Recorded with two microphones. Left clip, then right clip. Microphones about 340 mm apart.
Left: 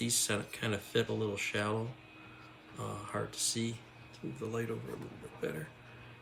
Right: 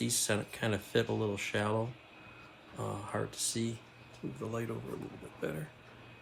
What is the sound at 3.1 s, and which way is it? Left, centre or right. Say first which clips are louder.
Speech: left 2 dB; centre.